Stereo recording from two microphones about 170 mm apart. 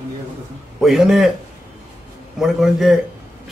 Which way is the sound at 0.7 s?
Centre (ahead or behind).